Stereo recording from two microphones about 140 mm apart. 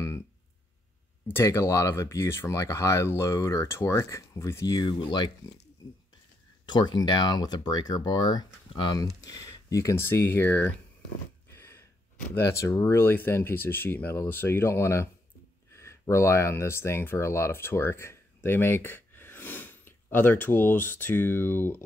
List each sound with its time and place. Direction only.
1.2 s speech: 20° left (ahead or behind)
6.6 s speech: 30° left (ahead or behind); by 10.7 s 15° left (ahead or behind)
11.5 s a sound: 15° left (ahead or behind)
12.4 s speech: 20° left (ahead or behind)